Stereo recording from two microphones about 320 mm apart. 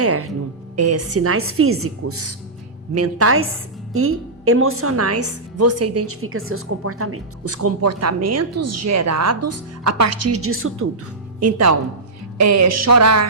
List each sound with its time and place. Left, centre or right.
0.0 s a woman's voice: right